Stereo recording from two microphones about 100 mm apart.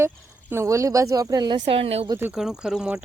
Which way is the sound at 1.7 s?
80° right.